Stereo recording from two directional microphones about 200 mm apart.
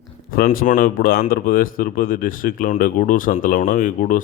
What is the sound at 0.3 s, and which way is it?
Speech, 45° left (ahead or behind).